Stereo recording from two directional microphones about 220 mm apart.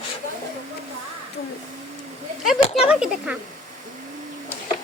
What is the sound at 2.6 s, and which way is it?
Speech, 25° left (ahead or behind).